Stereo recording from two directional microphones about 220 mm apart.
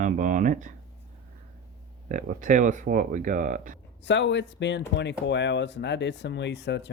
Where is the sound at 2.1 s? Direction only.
35° right (ahead or behind).